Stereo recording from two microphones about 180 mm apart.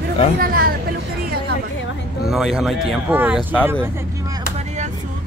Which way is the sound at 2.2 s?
Centre (ahead or behind).